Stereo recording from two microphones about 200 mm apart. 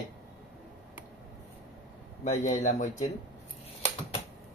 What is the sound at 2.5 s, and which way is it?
Speech, 35° left (ahead or behind).